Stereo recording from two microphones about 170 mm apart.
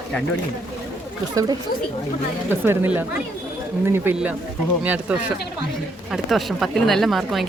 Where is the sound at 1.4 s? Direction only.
20° right (ahead or behind).